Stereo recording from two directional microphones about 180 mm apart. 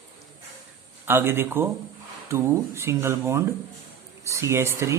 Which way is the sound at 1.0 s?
10° right (ahead or behind).